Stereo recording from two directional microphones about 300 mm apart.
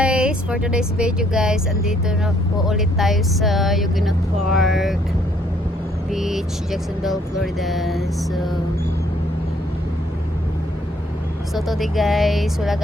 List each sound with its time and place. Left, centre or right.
0.0 s speech: centre
6.1 s speech: centre
11.5 s speech: centre